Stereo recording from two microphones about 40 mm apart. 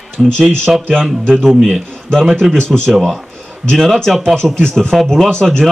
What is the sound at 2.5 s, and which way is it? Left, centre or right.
Speech, centre.